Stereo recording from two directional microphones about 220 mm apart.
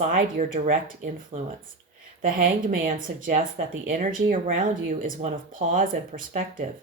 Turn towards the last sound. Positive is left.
turn(degrees=-35)  # may be behind; listen again after turning